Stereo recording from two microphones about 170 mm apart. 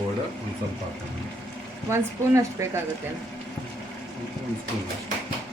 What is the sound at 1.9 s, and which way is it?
Speech, 15° right (ahead or behind).